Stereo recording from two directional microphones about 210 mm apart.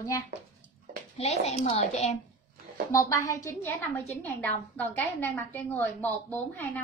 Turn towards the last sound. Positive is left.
turn(degrees=10)  # may be behind; listen again after turning